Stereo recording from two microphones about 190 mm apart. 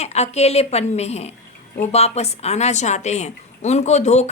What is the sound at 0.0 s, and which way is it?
A woman's voice, 35° left (ahead or behind).